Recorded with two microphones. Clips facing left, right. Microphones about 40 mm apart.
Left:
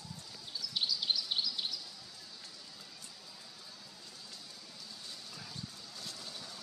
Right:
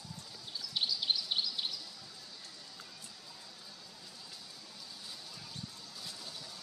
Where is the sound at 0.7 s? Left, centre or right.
Centre.